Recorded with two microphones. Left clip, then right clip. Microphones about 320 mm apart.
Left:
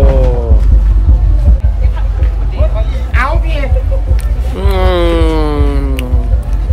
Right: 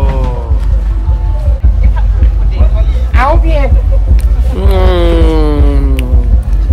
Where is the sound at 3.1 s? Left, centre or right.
Centre.